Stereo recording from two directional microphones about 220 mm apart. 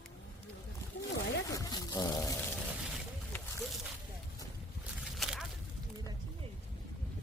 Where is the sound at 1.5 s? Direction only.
15° left (ahead or behind).